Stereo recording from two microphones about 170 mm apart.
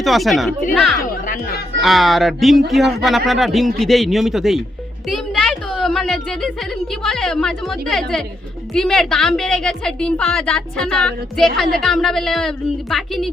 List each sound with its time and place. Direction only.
0.0 s a woman's voice: centre (ahead or behind)
1.2 s chatter: 50° left (ahead or behind)
1.8 s a woman's voice: centre (ahead or behind)